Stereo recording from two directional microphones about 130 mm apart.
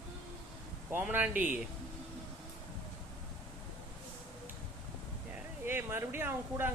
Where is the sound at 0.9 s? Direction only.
15° right (ahead or behind).